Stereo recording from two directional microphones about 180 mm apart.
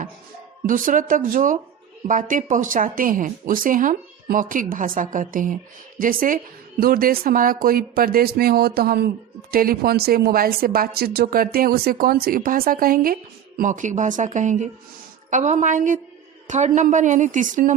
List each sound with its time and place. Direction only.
0.7 s speech: 50° right (ahead or behind)